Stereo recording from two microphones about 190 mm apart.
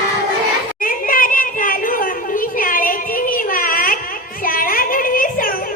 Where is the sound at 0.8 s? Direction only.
45° left (ahead or behind).